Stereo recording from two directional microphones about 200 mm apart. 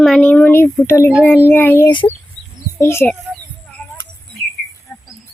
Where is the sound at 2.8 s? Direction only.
10° left (ahead or behind).